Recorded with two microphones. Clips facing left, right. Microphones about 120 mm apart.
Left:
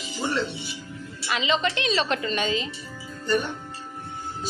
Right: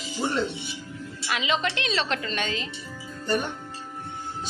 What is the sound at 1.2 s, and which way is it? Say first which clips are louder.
A woman's voice: left 2 dB; 5° right (ahead or behind).